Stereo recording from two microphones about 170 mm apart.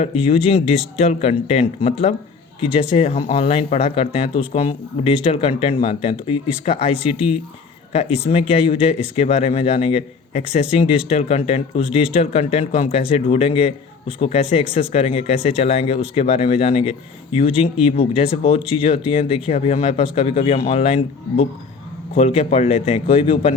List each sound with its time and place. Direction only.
0.0 s speech: 35° left (ahead or behind)